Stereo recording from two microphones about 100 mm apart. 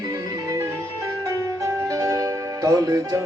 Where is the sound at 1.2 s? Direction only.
30° right (ahead or behind).